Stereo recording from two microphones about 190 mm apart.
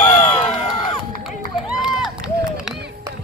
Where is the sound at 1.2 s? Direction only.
5° right (ahead or behind).